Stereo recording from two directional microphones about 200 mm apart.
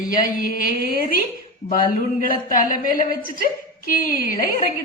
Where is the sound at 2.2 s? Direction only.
45° left (ahead or behind).